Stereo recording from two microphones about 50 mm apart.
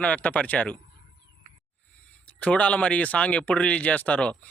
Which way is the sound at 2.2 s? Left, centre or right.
Left.